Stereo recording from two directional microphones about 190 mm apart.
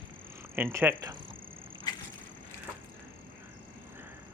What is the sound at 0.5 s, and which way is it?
Speech, 10° right (ahead or behind).